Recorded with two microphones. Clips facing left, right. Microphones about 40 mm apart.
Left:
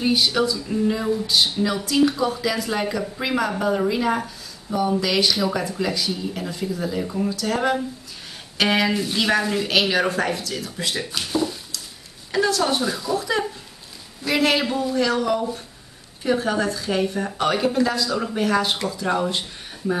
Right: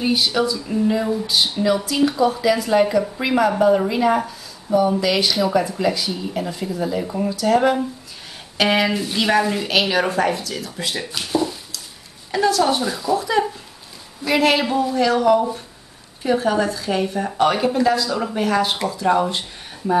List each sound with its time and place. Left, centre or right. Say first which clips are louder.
0.0 s speech: right 1 dB; centre